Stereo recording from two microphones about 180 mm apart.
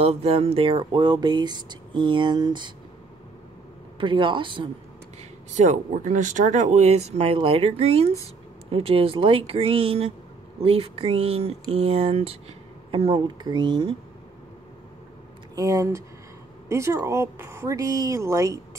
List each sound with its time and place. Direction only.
0.0 s speech: 35° right (ahead or behind)
4.0 s speech: 25° right (ahead or behind)
5.5 s speech: 45° right (ahead or behind); by 13.9 s 25° right (ahead or behind)
15.5 s speech: 20° right (ahead or behind)